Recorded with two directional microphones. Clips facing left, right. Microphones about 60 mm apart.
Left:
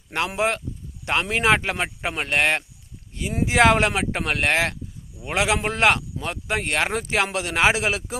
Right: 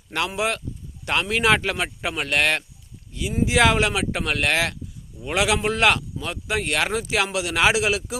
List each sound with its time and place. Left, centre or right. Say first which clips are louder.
0.3 s speech: left 2 dB; left
3.1 s speech: right 1 dB; left